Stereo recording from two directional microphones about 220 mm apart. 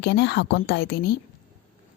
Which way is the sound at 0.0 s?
50° left (ahead or behind).